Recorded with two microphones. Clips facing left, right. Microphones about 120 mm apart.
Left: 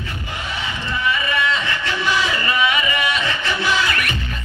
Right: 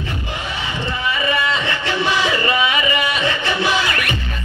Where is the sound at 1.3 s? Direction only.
30° right (ahead or behind).